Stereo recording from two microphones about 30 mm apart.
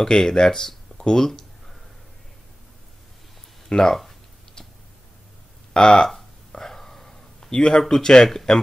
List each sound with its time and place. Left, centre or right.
0.0 s speech: centre
3.8 s speech: centre
5.7 s speech: left
6.5 s a sound: centre
7.9 s speech: left